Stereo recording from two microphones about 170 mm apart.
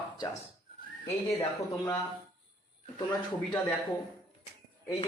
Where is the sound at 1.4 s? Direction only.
15° left (ahead or behind).